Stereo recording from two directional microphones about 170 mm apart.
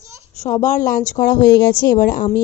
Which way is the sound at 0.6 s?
50° left (ahead or behind).